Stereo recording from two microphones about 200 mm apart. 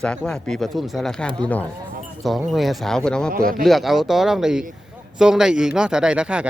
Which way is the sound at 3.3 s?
45° right (ahead or behind).